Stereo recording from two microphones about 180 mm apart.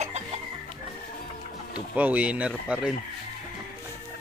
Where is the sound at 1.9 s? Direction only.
10° right (ahead or behind).